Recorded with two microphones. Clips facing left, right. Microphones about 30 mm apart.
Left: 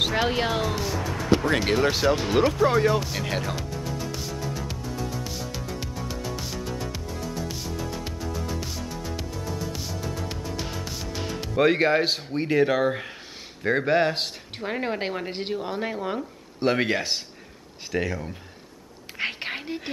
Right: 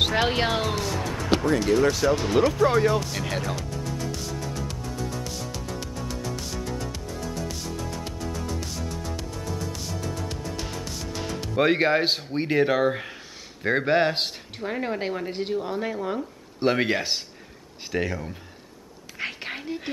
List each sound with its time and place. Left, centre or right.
0.0 s speech: centre
0.7 s music: centre
1.8 s speech: left
2.1 s speech: centre
5.2 s music: centre
11.5 s speech: centre
14.6 s speech: centre
16.6 s speech: centre
19.1 s whispering: centre